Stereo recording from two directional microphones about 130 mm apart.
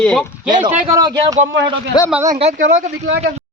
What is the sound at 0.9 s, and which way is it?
Speech, 30° right (ahead or behind).